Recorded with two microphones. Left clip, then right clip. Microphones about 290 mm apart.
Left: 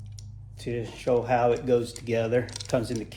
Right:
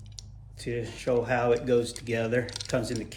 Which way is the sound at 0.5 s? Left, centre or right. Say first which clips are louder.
Even; centre.